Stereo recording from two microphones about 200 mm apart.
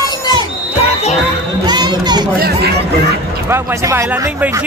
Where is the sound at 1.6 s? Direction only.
20° right (ahead or behind).